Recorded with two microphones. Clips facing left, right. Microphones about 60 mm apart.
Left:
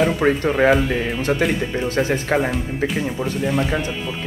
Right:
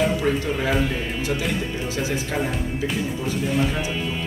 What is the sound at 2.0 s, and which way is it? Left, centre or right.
Speech, left.